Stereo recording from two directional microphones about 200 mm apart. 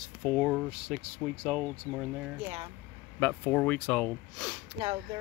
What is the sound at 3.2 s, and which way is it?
Speech, 10° left (ahead or behind).